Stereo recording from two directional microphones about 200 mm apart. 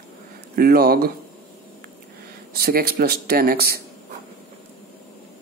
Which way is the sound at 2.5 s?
50° right (ahead or behind).